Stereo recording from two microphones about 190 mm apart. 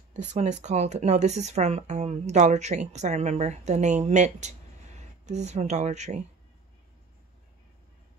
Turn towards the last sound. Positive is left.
turn(degrees=-35)  # may be behind; listen again after turning